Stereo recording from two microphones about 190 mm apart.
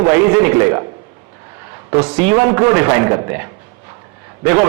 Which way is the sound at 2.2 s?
10° right (ahead or behind).